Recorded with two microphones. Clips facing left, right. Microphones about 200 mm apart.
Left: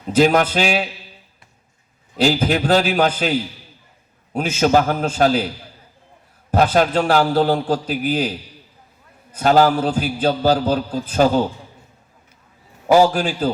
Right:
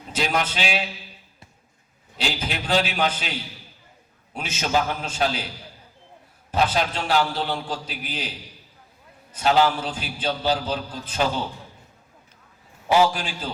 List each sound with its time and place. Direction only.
0.2 s a man's voice: 45° left (ahead or behind)
2.2 s a man's voice: 45° left (ahead or behind)
4.4 s a man's voice: 45° left (ahead or behind)
6.7 s a man's voice: 45° left (ahead or behind)
9.4 s a man's voice: 45° left (ahead or behind)
12.9 s a man's voice: 45° left (ahead or behind)